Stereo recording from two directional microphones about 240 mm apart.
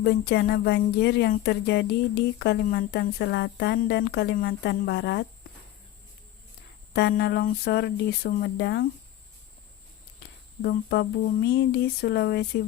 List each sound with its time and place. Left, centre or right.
0.0 s speech: left
6.9 s speech: left
10.6 s speech: left